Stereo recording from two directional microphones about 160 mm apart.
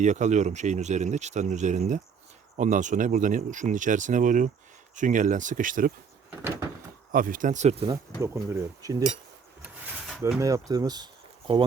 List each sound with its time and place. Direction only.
0.0 s speech: 50° right (ahead or behind)
7.1 s speech: 60° right (ahead or behind); by 7.9 s 45° right (ahead or behind)
8.2 s speech: 15° right (ahead or behind)
9.6 s a sound: 5° right (ahead or behind)
10.4 s speech: 20° right (ahead or behind)